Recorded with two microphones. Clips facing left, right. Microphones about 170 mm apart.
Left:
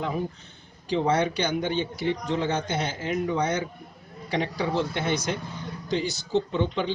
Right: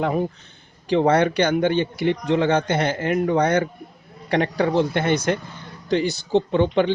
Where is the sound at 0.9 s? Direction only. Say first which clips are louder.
Right 6 dB; 65° right (ahead or behind).